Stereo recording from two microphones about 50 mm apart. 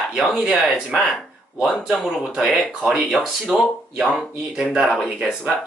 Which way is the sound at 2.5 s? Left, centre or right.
Centre.